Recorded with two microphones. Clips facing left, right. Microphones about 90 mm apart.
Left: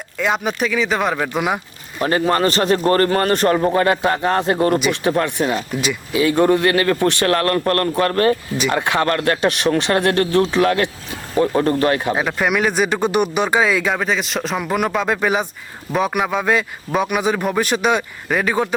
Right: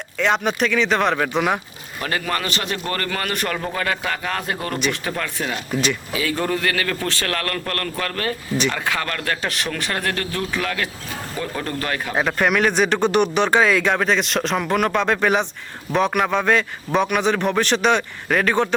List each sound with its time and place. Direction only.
0.2 s speech: 5° left (ahead or behind)
2.0 s a man's voice: 30° left (ahead or behind)
4.9 s speech: 25° left (ahead or behind)
7.3 s a man's voice: 30° left (ahead or behind)
8.7 s a man's voice: 25° left (ahead or behind)
9.5 s speech: 20° left (ahead or behind)
9.9 s speech: 30° left (ahead or behind)
11.3 s a man's voice: 35° left (ahead or behind)
12.1 s a man's voice: 5° left (ahead or behind)